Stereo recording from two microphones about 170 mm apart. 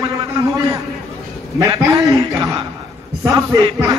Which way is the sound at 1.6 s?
20° right (ahead or behind).